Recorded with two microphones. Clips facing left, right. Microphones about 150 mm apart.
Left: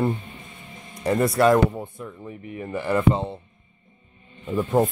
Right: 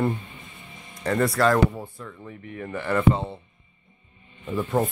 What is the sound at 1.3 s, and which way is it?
Speech, 20° left (ahead or behind).